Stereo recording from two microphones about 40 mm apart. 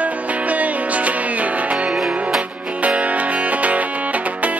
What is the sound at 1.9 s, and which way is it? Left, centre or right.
Music, centre.